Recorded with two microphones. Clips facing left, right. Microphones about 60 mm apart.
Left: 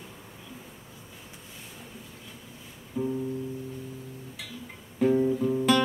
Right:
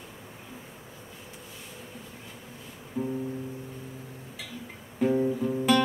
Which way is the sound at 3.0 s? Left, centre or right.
Right.